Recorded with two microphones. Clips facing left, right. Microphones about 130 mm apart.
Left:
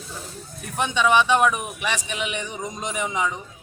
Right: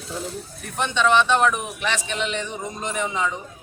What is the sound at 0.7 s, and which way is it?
A man's voice, 10° left (ahead or behind).